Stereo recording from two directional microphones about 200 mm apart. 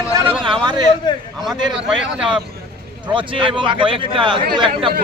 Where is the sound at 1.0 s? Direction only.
20° left (ahead or behind).